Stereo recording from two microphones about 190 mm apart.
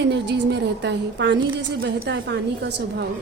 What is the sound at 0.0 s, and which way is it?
A woman's voice, 65° right (ahead or behind).